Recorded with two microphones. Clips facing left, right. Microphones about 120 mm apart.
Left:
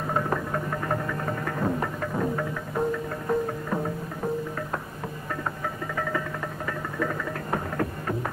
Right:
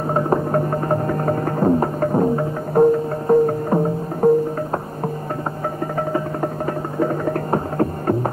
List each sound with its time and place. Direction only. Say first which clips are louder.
0.1 s music: right 9 dB; 35° right (ahead or behind)
5.9 s music: right 8 dB; 40° right (ahead or behind)